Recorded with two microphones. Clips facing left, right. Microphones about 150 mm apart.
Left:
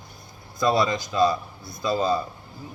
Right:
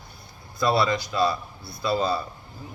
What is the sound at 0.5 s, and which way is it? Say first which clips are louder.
A man's voice: left 1 dB; 20° left (ahead or behind).